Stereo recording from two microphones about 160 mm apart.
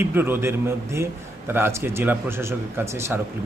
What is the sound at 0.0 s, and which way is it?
A man's voice, 15° right (ahead or behind).